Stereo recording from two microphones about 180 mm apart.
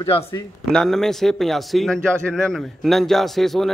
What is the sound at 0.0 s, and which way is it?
Speech, 30° left (ahead or behind).